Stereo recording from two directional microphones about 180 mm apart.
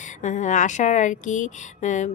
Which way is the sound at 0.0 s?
45° left (ahead or behind).